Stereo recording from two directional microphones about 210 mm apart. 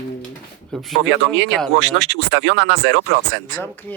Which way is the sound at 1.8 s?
70° right (ahead or behind).